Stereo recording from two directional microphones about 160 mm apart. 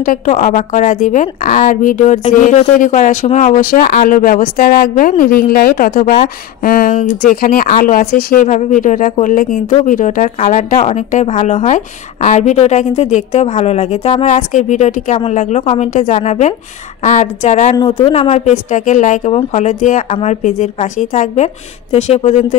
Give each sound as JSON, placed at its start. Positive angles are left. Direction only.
{"t": 0.0, "sound": "speech", "side_deg": 55}
{"t": 17.7, "sound": "speech", "side_deg": 25}
{"t": 18.1, "sound": "speech", "side_deg": 45}